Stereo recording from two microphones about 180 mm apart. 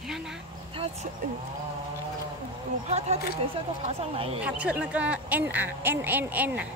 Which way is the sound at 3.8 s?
30° right (ahead or behind).